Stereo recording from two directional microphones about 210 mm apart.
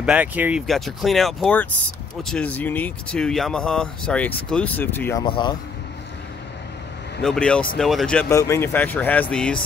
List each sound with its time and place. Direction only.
0.0 s speech: 5° right (ahead or behind); by 5.2 s 10° left (ahead or behind)
5.2 s speech: 20° left (ahead or behind)
7.2 s speech: 5° left (ahead or behind)